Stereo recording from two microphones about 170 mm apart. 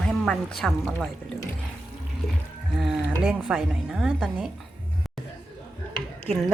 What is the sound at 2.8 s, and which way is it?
Speech, 5° right (ahead or behind).